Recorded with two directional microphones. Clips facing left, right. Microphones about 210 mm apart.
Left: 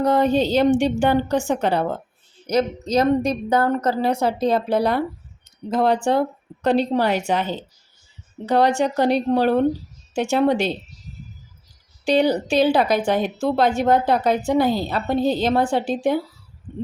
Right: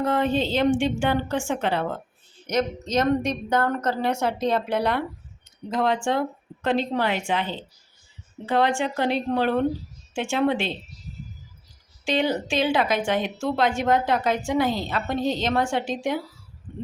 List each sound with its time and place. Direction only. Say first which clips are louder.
0.0 s speech: left 5 dB; 40° left (ahead or behind)
12.0 s speech: left 6 dB; 40° left (ahead or behind)